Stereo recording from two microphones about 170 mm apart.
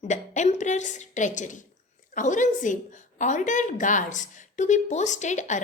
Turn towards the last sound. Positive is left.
turn(degrees=45)  # may be behind; listen again after turning